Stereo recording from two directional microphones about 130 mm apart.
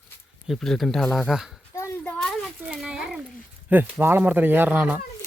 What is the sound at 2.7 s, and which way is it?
Speech, 5° right (ahead or behind).